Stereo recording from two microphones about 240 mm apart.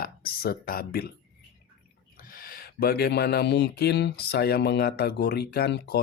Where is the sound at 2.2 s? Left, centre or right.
Left.